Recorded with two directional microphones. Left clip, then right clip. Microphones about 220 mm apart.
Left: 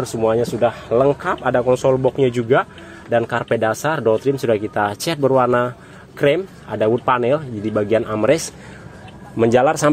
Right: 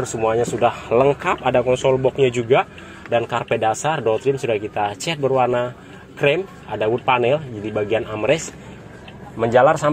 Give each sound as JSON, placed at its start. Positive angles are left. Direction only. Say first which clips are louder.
{"t": 0.0, "sound": "speech", "louder": "left 1 dB", "side_deg": 35}
{"t": 9.4, "sound": "speech", "louder": "even", "side_deg": 65}